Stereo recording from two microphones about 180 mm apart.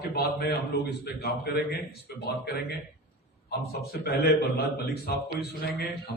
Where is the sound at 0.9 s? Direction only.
60° left (ahead or behind).